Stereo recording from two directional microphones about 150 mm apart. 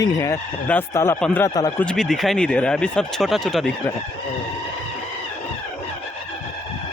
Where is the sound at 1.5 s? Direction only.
25° left (ahead or behind).